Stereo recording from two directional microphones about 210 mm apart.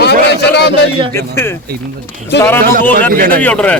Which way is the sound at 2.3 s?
55° left (ahead or behind).